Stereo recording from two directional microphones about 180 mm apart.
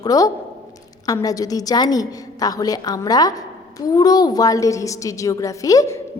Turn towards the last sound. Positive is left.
turn(degrees=20)  # may be behind; listen again after turning